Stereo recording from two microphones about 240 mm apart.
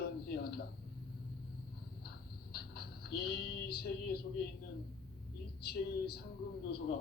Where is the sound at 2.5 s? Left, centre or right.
Left.